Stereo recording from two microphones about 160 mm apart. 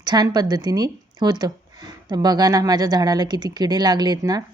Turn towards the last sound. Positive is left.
turn(degrees=-25)  # may be behind; listen again after turning